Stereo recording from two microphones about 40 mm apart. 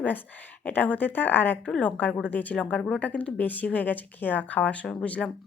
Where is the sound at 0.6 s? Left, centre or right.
Left.